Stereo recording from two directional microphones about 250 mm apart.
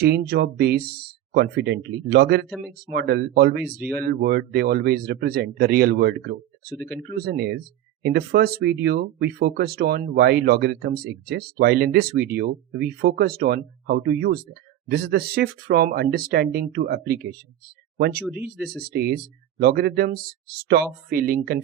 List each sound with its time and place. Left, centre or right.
0.0 s speech: right
2.5 s speech: centre
2.9 s speech: right
3.8 s speech: centre
4.0 s speech: right
6.7 s speech: centre
7.2 s speech: right
18.7 s speech: right